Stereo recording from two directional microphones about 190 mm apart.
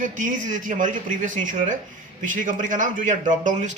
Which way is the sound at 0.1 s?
40° right (ahead or behind).